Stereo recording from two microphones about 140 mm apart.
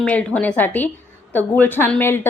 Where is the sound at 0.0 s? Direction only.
5° left (ahead or behind).